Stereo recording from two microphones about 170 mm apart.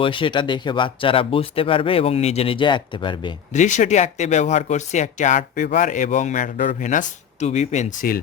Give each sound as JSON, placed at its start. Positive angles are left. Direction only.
{"t": 0.0, "sound": "speech", "side_deg": 30}
{"t": 3.5, "sound": "speech", "side_deg": 45}